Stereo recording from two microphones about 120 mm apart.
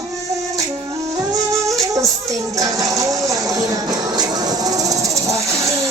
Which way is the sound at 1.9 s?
25° right (ahead or behind).